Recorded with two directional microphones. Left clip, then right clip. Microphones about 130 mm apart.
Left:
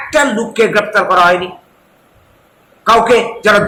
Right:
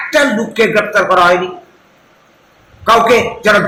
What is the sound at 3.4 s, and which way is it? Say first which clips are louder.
Speech: even; 20° left (ahead or behind).